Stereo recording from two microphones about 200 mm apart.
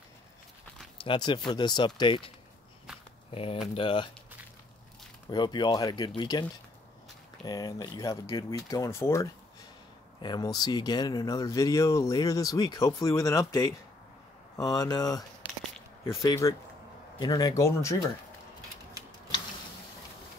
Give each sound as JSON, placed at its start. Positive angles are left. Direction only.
{"t": 0.9, "sound": "speech", "side_deg": 25}
{"t": 5.3, "sound": "speech", "side_deg": 20}
{"t": 7.4, "sound": "speech", "side_deg": 20}
{"t": 19.0, "sound": "a sound", "side_deg": -15}